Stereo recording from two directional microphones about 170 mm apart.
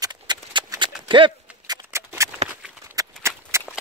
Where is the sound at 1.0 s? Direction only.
30° right (ahead or behind).